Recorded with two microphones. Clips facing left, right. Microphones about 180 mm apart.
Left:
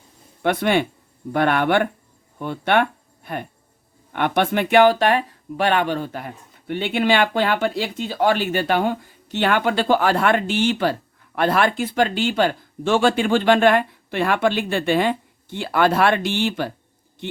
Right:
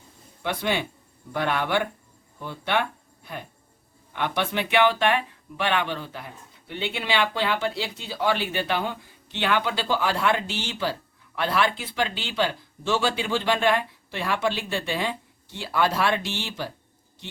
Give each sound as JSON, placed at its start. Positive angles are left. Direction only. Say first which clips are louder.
{"t": 0.4, "sound": "speech", "louder": "left 8 dB", "side_deg": 55}